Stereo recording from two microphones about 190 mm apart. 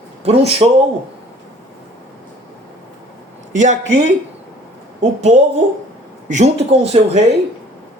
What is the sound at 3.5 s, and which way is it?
Speech, 40° right (ahead or behind).